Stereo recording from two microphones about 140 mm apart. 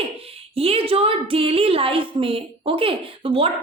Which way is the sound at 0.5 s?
45° right (ahead or behind).